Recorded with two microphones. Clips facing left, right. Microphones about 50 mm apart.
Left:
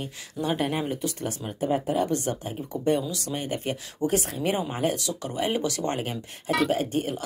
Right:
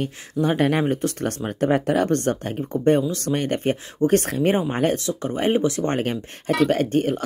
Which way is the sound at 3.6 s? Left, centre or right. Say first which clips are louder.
Right 7 dB; right.